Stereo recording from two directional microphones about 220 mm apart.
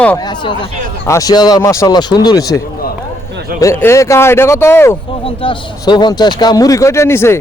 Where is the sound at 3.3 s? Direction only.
45° right (ahead or behind).